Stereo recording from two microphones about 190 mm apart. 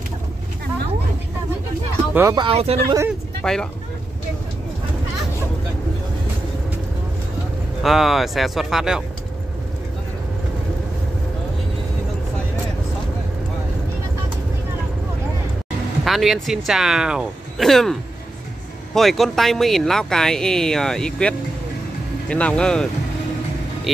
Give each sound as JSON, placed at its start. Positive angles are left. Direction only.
{"t": 2.3, "sound": "speech", "side_deg": -30}
{"t": 3.1, "sound": "speech", "side_deg": 5}
{"t": 7.8, "sound": "speech", "side_deg": 0}
{"t": 16.0, "sound": "speech", "side_deg": 0}
{"t": 18.9, "sound": "speech", "side_deg": 0}